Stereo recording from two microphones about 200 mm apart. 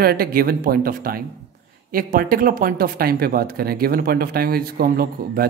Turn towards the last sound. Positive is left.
turn(degrees=-50)  # may be behind; listen again after turning